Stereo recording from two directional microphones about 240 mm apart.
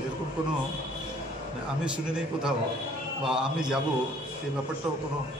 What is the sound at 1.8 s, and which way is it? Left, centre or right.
A man's voice, centre.